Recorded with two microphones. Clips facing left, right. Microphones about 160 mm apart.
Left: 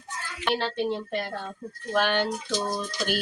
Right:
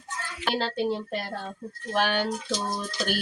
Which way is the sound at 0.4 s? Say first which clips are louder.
Even; 5° right (ahead or behind).